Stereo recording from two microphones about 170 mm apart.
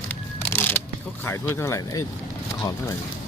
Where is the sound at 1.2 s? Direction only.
15° left (ahead or behind).